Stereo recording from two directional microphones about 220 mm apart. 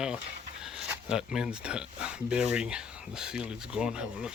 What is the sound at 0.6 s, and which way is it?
Speech, 5° right (ahead or behind).